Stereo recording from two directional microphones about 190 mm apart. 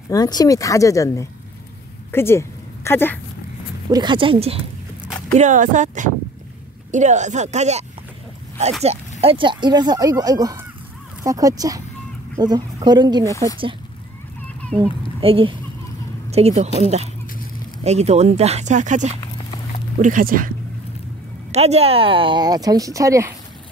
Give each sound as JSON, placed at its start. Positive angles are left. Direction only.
{"t": 0.1, "sound": "speech", "side_deg": 20}
{"t": 3.9, "sound": "speech", "side_deg": -25}
{"t": 5.3, "sound": "speech", "side_deg": -40}
{"t": 9.2, "sound": "speech", "side_deg": -30}
{"t": 13.3, "sound": "speech", "side_deg": 15}
{"t": 15.1, "sound": "speech", "side_deg": -30}
{"t": 17.8, "sound": "speech", "side_deg": -35}
{"t": 21.5, "sound": "speech", "side_deg": -35}